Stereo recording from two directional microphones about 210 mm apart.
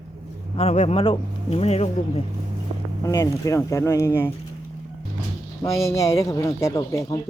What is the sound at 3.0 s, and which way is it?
Speech, 15° left (ahead or behind).